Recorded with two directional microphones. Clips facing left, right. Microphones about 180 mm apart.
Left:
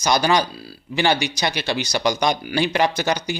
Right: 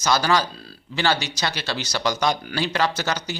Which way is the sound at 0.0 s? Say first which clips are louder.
Left 2 dB; 15° left (ahead or behind).